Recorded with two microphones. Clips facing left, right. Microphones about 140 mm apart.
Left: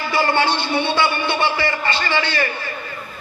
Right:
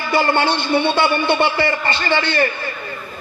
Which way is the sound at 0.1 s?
50° right (ahead or behind).